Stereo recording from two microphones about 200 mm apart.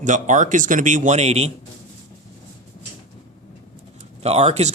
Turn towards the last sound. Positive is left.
turn(degrees=-35)  # may be behind; listen again after turning